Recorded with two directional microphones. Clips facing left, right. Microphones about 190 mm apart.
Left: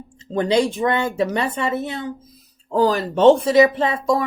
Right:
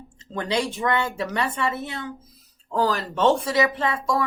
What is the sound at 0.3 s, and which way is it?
A woman's voice, 20° left (ahead or behind).